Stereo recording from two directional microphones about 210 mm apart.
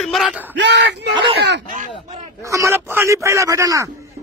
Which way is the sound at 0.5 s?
55° right (ahead or behind).